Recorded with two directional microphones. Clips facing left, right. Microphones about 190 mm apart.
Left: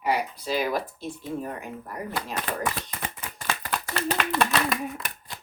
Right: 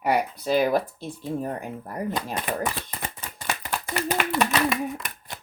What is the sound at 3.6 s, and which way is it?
Clapping, 15° right (ahead or behind).